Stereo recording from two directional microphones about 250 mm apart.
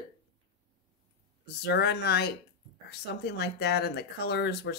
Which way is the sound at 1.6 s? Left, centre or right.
Left.